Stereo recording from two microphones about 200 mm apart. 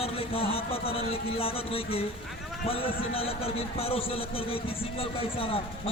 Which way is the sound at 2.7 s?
30° left (ahead or behind).